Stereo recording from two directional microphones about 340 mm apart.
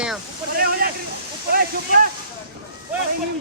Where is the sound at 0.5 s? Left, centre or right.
Right.